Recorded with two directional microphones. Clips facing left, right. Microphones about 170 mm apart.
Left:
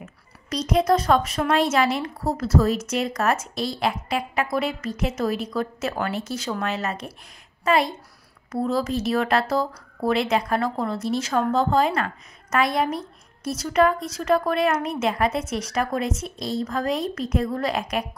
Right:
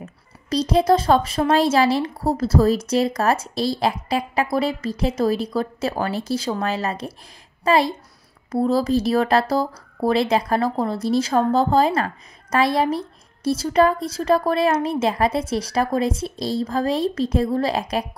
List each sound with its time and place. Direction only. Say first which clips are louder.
0.0 s speech: right 4 dB; 30° right (ahead or behind)